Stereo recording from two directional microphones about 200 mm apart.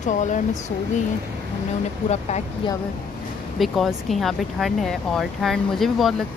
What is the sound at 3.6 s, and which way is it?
Speech, centre (ahead or behind).